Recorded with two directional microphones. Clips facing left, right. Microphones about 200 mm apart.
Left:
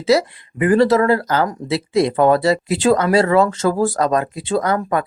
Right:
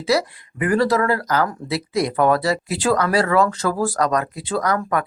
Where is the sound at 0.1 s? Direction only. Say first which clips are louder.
Left 4 dB; 25° left (ahead or behind).